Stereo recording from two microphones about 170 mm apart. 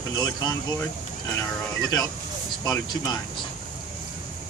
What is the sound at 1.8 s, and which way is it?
Speech, 20° left (ahead or behind).